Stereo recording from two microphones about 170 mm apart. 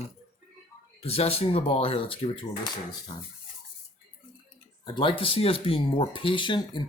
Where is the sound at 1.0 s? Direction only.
35° left (ahead or behind).